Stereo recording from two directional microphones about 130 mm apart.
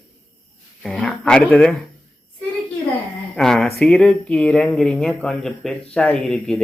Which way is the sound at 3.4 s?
5° left (ahead or behind).